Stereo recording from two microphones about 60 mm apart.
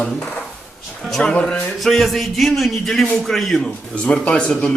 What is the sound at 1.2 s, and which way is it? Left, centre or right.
Speech, centre.